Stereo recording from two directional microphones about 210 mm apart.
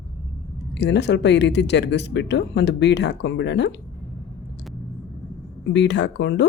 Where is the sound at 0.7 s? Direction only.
55° left (ahead or behind).